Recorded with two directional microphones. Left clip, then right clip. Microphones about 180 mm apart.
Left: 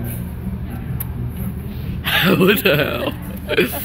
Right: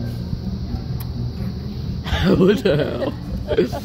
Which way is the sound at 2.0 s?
25° right (ahead or behind).